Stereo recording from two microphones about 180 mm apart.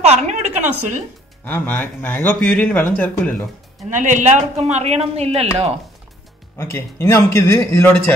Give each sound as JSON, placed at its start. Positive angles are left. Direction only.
{"t": 0.0, "sound": "a woman's voice", "side_deg": -40}
{"t": 1.4, "sound": "speech", "side_deg": 10}
{"t": 3.9, "sound": "a man's voice", "side_deg": -45}
{"t": 6.6, "sound": "speech", "side_deg": 15}